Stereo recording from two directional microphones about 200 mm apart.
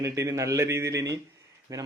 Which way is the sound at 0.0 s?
15° right (ahead or behind).